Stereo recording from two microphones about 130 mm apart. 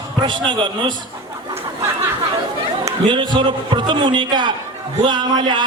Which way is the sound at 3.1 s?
35° right (ahead or behind).